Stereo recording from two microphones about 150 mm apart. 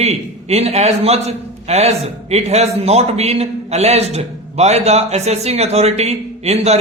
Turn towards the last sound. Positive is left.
turn(degrees=-45)  # may be behind; listen again after turning